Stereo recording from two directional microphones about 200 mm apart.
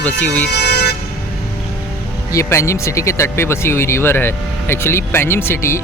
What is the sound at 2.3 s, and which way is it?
Speech, 15° left (ahead or behind).